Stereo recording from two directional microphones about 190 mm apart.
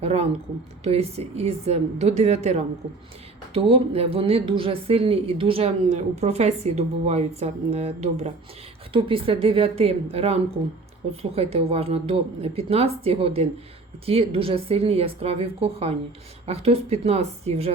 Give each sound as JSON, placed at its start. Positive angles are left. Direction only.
{"t": 0.0, "sound": "a woman's voice", "side_deg": -35}